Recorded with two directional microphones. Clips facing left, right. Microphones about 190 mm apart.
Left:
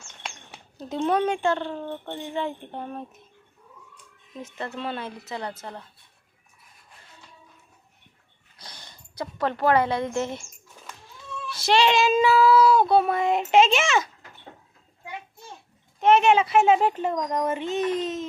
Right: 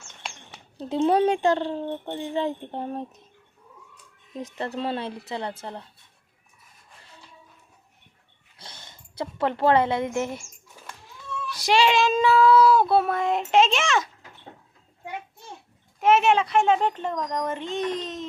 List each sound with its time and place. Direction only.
0.8 s speech: 30° right (ahead or behind)
2.2 s speech: 35° right (ahead or behind)
4.4 s speech: 35° right (ahead or behind)
8.5 s a sound: 25° right (ahead or behind); by 10.9 s 5° right (ahead or behind)
11.5 s child singing: 10° right (ahead or behind)
16.0 s child singing: 5° right (ahead or behind)